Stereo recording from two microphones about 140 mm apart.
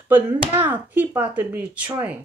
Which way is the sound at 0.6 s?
15° right (ahead or behind).